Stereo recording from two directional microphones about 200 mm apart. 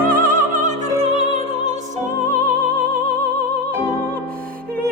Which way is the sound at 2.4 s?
5° left (ahead or behind).